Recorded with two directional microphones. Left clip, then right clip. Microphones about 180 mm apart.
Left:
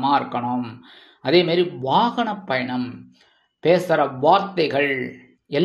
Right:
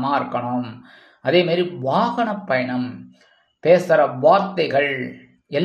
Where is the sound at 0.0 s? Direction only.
30° left (ahead or behind).